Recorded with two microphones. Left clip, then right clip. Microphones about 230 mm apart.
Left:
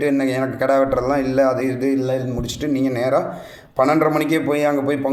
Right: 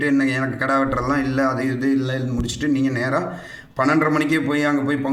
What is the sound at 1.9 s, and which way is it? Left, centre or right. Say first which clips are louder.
Speech: left 2 dB; centre.